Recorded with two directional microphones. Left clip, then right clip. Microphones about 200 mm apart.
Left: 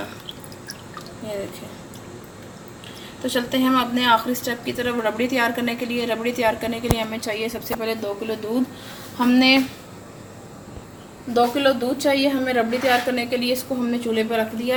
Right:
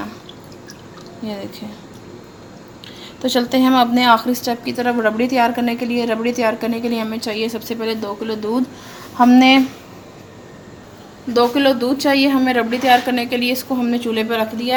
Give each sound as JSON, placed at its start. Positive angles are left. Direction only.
{"t": 3.2, "sound": "a woman's voice", "side_deg": -45}
{"t": 11.3, "sound": "a woman's voice", "side_deg": -45}